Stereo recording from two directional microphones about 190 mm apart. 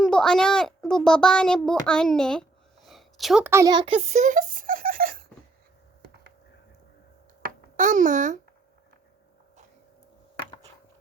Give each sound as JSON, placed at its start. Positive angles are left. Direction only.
{"t": 0.0, "sound": "a child's voice", "side_deg": 5}
{"t": 7.4, "sound": "babbling", "side_deg": -40}